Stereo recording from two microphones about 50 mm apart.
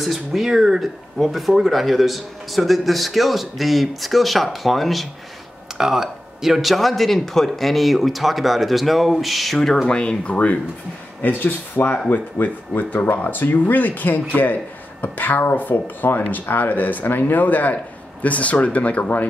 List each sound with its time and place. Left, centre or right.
0.0 s speech: centre
9.8 s speech: left
11.2 s speech: left